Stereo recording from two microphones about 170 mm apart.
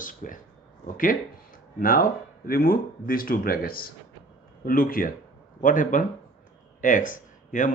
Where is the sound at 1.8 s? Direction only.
55° left (ahead or behind).